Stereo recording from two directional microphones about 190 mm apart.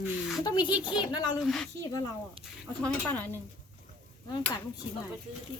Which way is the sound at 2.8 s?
10° left (ahead or behind).